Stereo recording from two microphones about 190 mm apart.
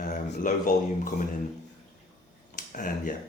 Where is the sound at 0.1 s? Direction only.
45° left (ahead or behind).